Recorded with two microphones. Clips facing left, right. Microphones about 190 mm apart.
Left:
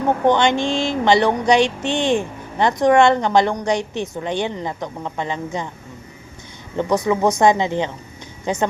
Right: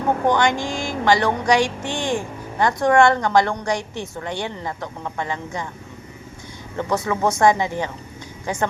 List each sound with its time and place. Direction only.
0.3 s speech: 25° left (ahead or behind)
6.7 s speech: 15° left (ahead or behind)